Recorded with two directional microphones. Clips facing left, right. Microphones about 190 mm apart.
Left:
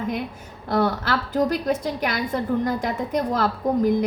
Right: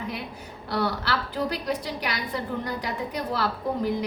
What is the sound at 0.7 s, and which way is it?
A woman's voice, 50° left (ahead or behind).